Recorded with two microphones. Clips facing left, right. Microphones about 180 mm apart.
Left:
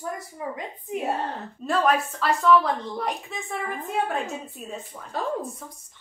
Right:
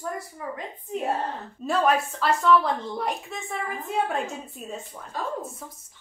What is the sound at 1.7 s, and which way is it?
A woman's voice, centre (ahead or behind).